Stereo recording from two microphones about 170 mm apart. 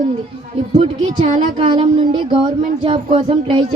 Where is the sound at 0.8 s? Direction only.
40° right (ahead or behind).